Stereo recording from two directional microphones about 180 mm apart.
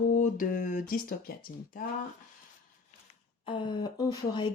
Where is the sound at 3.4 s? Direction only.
25° left (ahead or behind).